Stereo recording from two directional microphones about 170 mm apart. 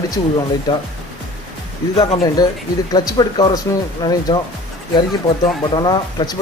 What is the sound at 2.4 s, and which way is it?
Speech, 20° left (ahead or behind).